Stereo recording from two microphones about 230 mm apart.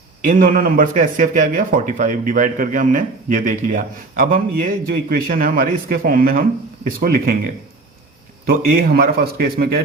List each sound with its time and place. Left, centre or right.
0.2 s a man's voice: right
8.4 s a man's voice: right